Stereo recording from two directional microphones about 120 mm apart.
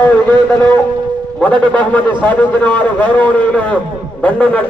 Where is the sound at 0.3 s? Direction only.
35° right (ahead or behind).